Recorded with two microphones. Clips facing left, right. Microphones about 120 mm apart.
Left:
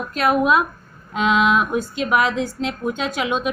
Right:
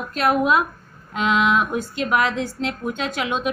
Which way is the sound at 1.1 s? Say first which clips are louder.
Left 2 dB; 15° left (ahead or behind).